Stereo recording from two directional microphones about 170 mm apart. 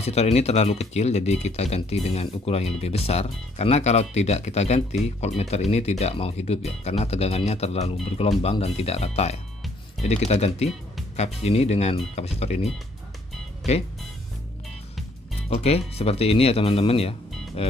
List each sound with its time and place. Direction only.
0.0 s speech: 40° left (ahead or behind)
15.5 s speech: 35° left (ahead or behind)